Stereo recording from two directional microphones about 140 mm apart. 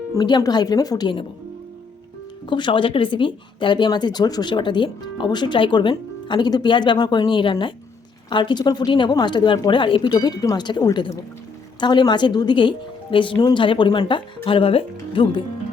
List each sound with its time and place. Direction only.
0.2 s speech: 30° left (ahead or behind)
2.5 s speech: 35° left (ahead or behind)